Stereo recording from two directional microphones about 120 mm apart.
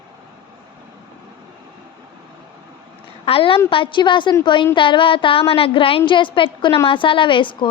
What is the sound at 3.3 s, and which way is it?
A woman's voice, 50° left (ahead or behind).